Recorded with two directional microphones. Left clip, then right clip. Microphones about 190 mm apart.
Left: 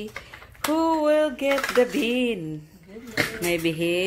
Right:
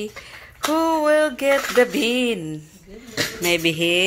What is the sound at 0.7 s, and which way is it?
Speech, centre (ahead or behind).